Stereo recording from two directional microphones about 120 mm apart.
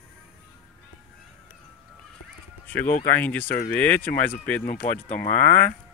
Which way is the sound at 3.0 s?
15° left (ahead or behind).